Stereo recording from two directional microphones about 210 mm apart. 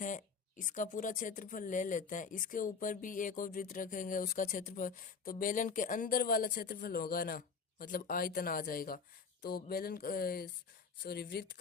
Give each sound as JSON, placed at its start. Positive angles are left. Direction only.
{"t": 0.0, "sound": "speech", "side_deg": 35}
{"t": 9.4, "sound": "mantra", "side_deg": 45}